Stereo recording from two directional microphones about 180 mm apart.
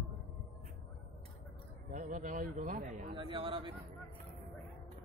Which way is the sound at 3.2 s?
30° right (ahead or behind).